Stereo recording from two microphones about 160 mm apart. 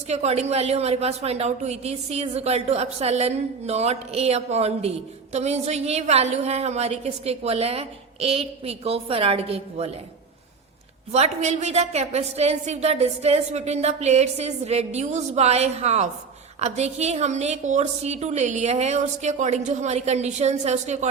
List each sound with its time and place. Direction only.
0.1 s a woman's voice: 45° right (ahead or behind)
11.1 s a woman's voice: 45° right (ahead or behind)